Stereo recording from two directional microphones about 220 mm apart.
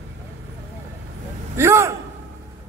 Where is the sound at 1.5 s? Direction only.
10° right (ahead or behind).